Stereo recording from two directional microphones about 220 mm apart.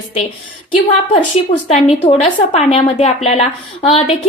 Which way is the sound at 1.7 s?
30° left (ahead or behind).